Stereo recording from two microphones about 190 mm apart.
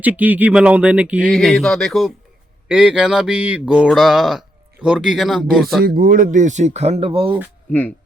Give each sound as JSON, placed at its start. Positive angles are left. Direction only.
{"t": 0.0, "sound": "mantra", "side_deg": -10}
{"t": 5.8, "sound": "speech", "side_deg": -50}
{"t": 7.7, "sound": "speech", "side_deg": 10}